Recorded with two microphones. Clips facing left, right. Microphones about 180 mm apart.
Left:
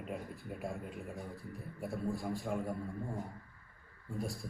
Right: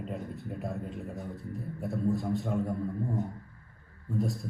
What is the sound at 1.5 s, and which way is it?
A man's voice, centre (ahead or behind).